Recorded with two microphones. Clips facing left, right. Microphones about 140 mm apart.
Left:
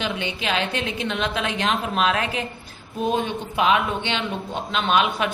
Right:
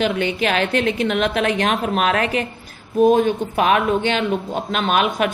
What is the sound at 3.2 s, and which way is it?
A woman's voice, 45° right (ahead or behind).